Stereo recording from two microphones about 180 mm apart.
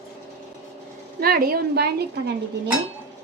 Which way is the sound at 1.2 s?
55° right (ahead or behind).